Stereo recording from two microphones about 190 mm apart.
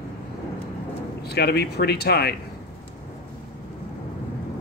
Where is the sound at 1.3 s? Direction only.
55° left (ahead or behind).